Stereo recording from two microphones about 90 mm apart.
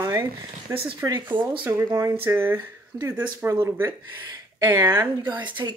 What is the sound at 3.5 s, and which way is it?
Speech, 35° right (ahead or behind).